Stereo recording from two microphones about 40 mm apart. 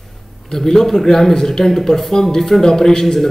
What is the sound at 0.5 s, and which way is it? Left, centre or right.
A man's voice, centre.